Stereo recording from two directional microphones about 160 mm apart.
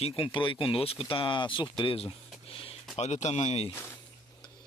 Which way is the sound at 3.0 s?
45° left (ahead or behind).